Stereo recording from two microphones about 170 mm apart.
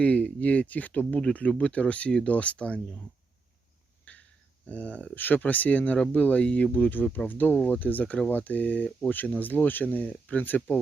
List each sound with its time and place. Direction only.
0.0 s speech: 5° left (ahead or behind)
4.1 s a sound: 10° left (ahead or behind)
4.6 s speech: 10° left (ahead or behind)